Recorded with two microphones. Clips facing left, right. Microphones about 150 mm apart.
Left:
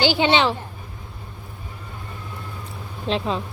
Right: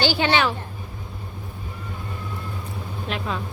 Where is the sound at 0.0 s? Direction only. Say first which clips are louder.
Left 2 dB; 20° left (ahead or behind).